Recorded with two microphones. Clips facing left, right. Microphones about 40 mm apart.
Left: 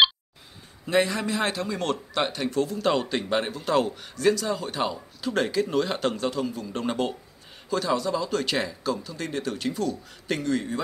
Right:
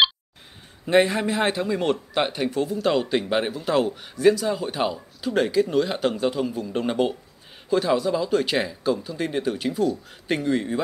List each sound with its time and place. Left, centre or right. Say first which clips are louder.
0.8 s a man's voice: right 4 dB; right; by 9.9 s centre
10.2 s a man's voice: right 3 dB; right